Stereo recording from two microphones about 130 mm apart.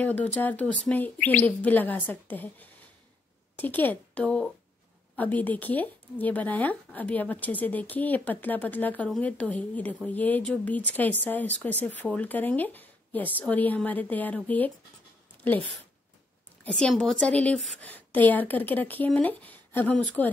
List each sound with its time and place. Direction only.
0.0 s speech: 10° left (ahead or behind)
16.6 s speech: 5° left (ahead or behind)